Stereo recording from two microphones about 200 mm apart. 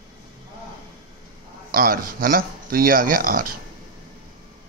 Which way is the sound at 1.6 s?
45° right (ahead or behind).